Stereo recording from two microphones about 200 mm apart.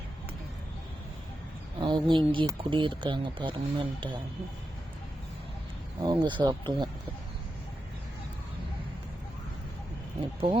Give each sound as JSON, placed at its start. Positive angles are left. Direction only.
{"t": 1.8, "sound": "speech", "side_deg": -25}
{"t": 6.0, "sound": "speech", "side_deg": -25}